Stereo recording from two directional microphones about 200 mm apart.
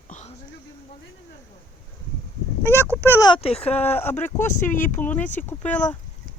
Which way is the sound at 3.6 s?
10° left (ahead or behind).